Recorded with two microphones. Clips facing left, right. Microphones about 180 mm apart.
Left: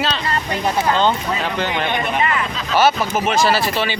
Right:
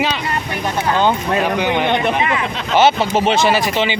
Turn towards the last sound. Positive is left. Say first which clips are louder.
# right 2 dB
turn(degrees=-15)  # may be behind; listen again after turning